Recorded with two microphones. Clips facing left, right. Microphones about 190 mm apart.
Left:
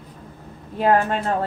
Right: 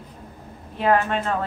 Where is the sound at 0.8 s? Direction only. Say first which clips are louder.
Left 2 dB; 40° left (ahead or behind).